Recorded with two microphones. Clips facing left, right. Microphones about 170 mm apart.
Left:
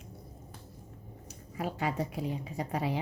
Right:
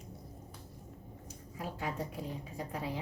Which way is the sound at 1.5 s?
75° left (ahead or behind).